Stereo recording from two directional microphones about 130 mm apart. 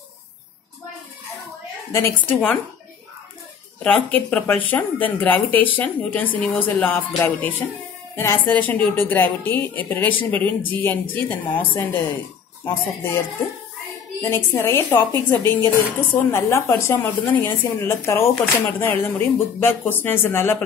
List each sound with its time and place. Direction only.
1.9 s a woman's voice: 20° left (ahead or behind)
3.8 s a woman's voice: 10° left (ahead or behind)
14.3 s a woman's voice: 20° left (ahead or behind)